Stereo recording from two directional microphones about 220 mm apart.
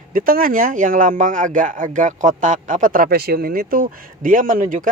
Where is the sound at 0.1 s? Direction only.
40° right (ahead or behind).